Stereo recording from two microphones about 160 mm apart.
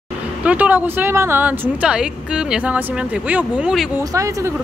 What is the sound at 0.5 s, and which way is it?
Speech, 10° right (ahead or behind).